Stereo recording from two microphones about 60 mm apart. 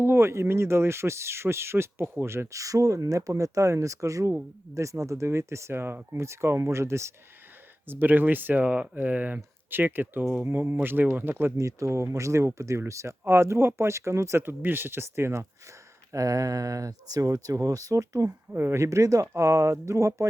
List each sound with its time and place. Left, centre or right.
0.0 s speech: right
2.6 s speech: right
7.9 s speech: right
11.5 s speech: right
16.1 s speech: right
18.5 s speech: right
18.8 s speech: right